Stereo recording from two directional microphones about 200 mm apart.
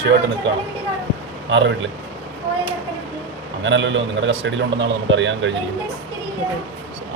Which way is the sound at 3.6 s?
65° right (ahead or behind).